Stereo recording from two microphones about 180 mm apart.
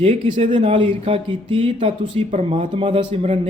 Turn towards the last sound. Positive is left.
turn(degrees=-30)  # may be behind; listen again after turning